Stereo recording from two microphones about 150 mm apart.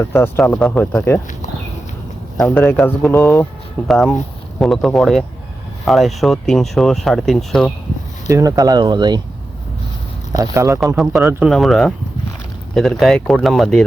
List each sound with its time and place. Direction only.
0.0 s speech: 15° left (ahead or behind)
2.4 s speech: 10° left (ahead or behind)
3.8 s speech: centre (ahead or behind)
8.3 s speech: 20° right (ahead or behind)
10.3 s speech: 20° right (ahead or behind)
10.9 s speech: centre (ahead or behind)
11.2 s speech: 15° right (ahead or behind)
11.4 s speech: centre (ahead or behind)